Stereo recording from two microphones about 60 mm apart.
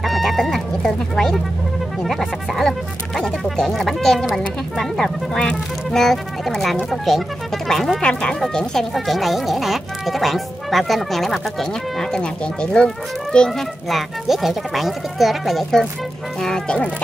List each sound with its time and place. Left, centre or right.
0.0 s speech: centre
8.0 s speech: centre
8.4 s speech: centre
13.8 s speech: centre
16.4 s speech: centre